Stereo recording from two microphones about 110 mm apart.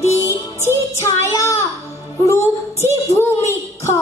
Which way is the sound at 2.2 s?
25° left (ahead or behind).